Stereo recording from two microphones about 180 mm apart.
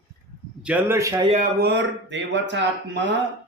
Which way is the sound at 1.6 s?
75° right (ahead or behind).